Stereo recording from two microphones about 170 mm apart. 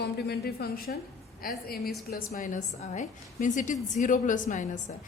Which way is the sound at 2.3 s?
50° left (ahead or behind).